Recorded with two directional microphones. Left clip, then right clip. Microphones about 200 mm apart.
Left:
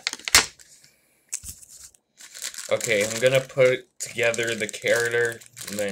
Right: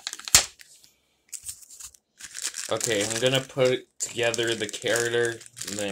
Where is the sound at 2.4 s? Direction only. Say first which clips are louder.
Left 3 dB; 25° right (ahead or behind).